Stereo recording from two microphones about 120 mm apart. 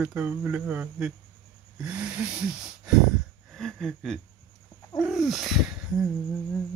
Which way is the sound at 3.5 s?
5° left (ahead or behind).